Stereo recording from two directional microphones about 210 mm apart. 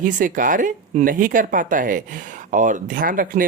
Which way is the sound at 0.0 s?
40° right (ahead or behind).